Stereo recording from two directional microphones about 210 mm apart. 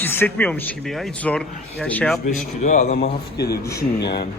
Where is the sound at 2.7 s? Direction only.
40° left (ahead or behind).